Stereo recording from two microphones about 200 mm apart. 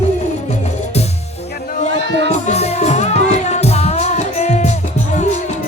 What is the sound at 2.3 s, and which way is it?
Music, 35° left (ahead or behind).